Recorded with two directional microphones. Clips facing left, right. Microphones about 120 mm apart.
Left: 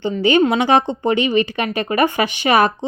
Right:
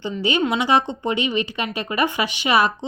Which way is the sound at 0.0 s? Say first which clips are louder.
Left 7 dB; 55° left (ahead or behind).